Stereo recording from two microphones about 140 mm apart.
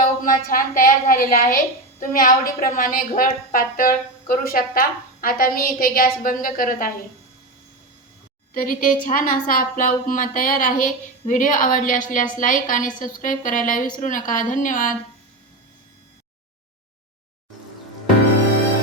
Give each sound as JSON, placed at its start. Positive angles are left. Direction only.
{"t": 0.3, "sound": "a woman's voice", "side_deg": 85}
{"t": 6.2, "sound": "a woman's voice", "side_deg": 75}
{"t": 8.5, "sound": "a woman's voice", "side_deg": 85}